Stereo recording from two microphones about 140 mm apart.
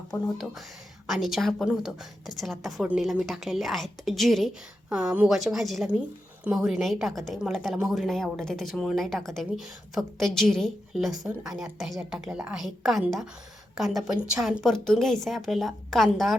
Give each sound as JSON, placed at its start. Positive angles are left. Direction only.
{"t": 0.1, "sound": "speech", "side_deg": 20}
{"t": 1.0, "sound": "a woman's voice", "side_deg": 0}